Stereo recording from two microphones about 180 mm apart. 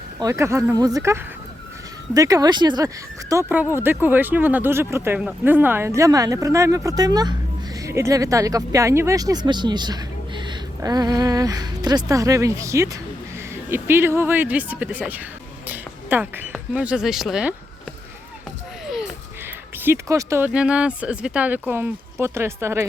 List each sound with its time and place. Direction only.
0.2 s speech: 15° right (ahead or behind)
19.5 s speech: 10° right (ahead or behind)